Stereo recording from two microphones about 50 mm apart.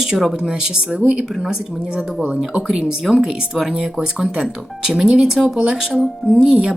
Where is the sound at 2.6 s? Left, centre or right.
Centre.